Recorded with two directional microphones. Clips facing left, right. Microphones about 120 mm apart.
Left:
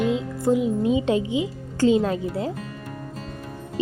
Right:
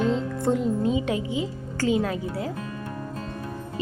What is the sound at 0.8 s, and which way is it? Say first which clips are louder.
Speech: left 4 dB; 20° left (ahead or behind).